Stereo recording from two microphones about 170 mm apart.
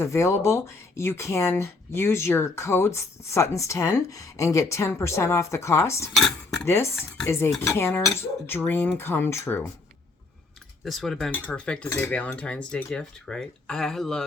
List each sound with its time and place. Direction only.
0.0 s speech: 15° left (ahead or behind)
10.8 s speech: centre (ahead or behind)